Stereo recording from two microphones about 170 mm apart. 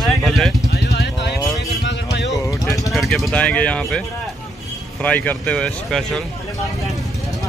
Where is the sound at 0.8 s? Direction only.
85° left.